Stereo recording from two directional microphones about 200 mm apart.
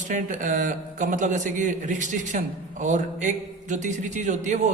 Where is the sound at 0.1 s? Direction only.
40° right (ahead or behind).